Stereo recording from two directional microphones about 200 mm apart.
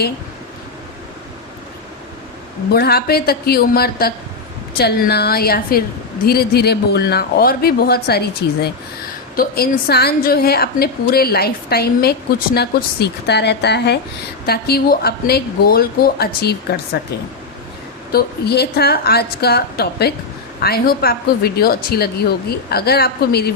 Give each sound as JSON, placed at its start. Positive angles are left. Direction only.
{"t": 2.7, "sound": "a woman's voice", "side_deg": 50}
{"t": 18.1, "sound": "a woman's voice", "side_deg": 55}